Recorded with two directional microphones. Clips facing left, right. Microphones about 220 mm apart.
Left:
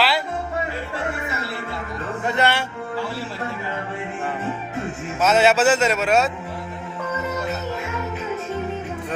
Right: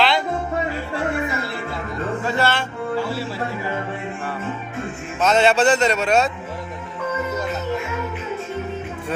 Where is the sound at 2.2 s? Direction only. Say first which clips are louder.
Left 2 dB; 20° left (ahead or behind).